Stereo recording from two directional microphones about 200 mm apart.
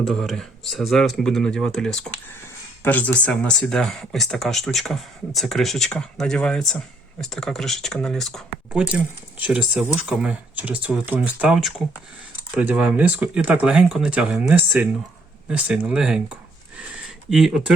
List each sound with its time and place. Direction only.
0.0 s speech: centre (ahead or behind)
17.2 s speech: centre (ahead or behind)